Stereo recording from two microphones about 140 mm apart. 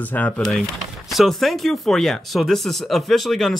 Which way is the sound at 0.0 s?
10° left (ahead or behind).